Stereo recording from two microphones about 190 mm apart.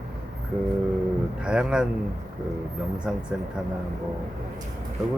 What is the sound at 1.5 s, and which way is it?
Speech, 5° right (ahead or behind).